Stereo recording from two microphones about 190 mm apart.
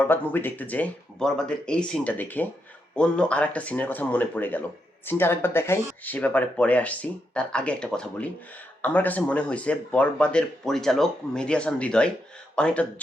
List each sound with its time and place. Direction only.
0.0 s speech: 10° left (ahead or behind)